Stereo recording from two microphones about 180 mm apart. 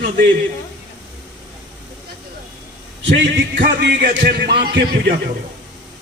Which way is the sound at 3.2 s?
80° right.